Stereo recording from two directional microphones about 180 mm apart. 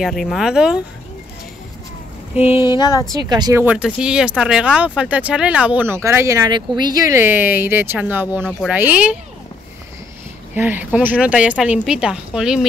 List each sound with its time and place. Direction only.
0.0 s speech: centre (ahead or behind)
2.3 s speech: 10° right (ahead or behind)
2.6 s a sound: 25° left (ahead or behind)
3.1 s speech: 25° right (ahead or behind)
3.6 s speech: 5° right (ahead or behind)
10.5 s speech: 10° right (ahead or behind)